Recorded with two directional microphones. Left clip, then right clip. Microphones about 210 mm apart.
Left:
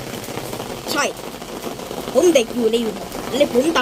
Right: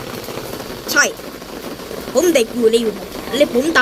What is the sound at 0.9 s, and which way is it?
Speech, 5° right (ahead or behind).